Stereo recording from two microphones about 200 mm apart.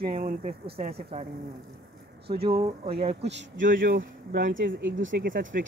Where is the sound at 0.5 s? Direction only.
30° right (ahead or behind).